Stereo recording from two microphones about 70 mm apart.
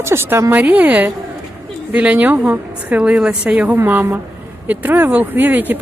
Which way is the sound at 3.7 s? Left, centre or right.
Right.